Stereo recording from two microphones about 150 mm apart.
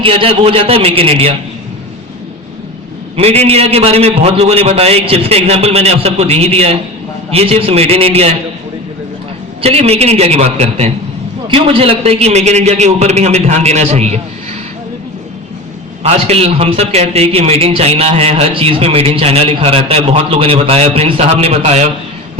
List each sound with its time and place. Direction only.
0.0 s a man's voice: 35° right (ahead or behind)
3.2 s a man's voice: 45° right (ahead or behind)
9.6 s a man's voice: 45° right (ahead or behind)
16.0 s a man's voice: 45° right (ahead or behind)